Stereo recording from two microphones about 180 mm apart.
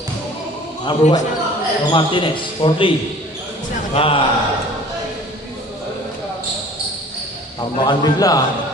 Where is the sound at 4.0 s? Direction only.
30° left (ahead or behind).